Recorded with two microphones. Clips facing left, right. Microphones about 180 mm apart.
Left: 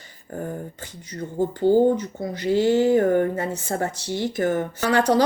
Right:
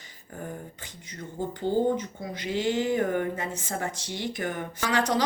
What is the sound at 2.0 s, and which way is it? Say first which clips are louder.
Speech: left 6 dB; 40° left (ahead or behind).